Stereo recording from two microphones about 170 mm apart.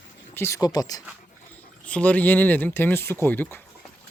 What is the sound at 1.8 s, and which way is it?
Speech, 10° left (ahead or behind).